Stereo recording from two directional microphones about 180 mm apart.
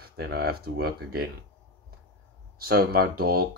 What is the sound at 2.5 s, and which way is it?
Speech, 60° right (ahead or behind).